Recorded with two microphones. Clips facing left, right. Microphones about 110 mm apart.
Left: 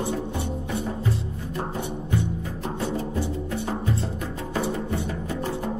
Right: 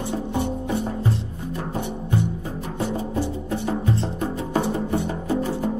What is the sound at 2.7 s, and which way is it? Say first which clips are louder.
Music: right 3 dB; 20° right (ahead or behind).